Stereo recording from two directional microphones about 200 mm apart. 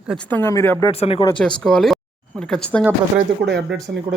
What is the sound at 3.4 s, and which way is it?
Speech, 50° right (ahead or behind).